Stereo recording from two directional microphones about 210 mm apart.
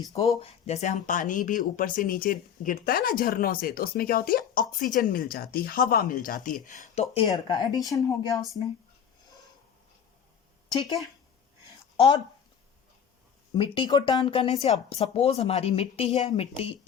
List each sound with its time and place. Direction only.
0.3 s speech: 30° left (ahead or behind)
7.3 s speech: 20° left (ahead or behind)
11.9 s speech: 25° left (ahead or behind)
13.5 s speech: 20° left (ahead or behind)